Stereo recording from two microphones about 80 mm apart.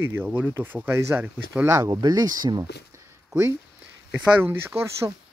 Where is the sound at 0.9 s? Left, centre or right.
Right.